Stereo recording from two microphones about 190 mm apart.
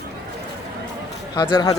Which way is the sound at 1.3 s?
20° left (ahead or behind).